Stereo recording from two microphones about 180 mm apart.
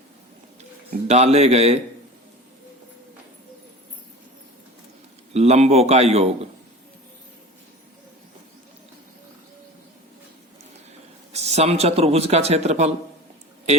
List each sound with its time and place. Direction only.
1.0 s speech: 35° right (ahead or behind)
5.3 s speech: 35° right (ahead or behind)
11.3 s speech: 35° right (ahead or behind)